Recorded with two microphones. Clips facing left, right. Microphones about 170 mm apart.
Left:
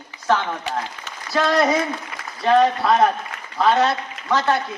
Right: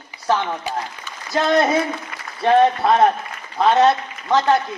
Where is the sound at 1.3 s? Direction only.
25° right (ahead or behind).